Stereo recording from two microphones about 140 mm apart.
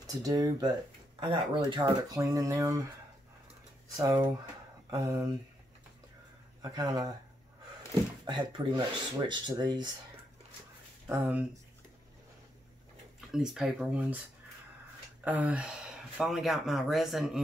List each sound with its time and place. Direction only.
0.0 s speech: 25° right (ahead or behind)
4.0 s speech: 20° right (ahead or behind)
6.6 s speech: 25° right (ahead or behind)
8.3 s speech: 30° right (ahead or behind)
11.1 s speech: 10° right (ahead or behind)
13.3 s speech: 5° right (ahead or behind)
15.2 s speech: 10° right (ahead or behind)